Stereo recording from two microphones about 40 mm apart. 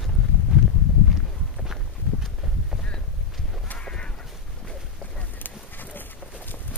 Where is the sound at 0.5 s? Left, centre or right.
Centre.